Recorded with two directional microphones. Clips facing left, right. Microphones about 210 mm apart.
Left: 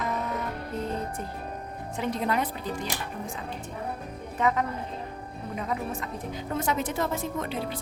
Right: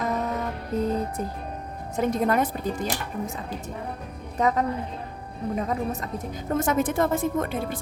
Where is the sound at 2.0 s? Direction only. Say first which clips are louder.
Right 5 dB; 45° right (ahead or behind).